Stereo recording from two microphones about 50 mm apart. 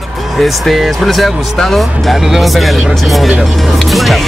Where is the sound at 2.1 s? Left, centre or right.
Centre.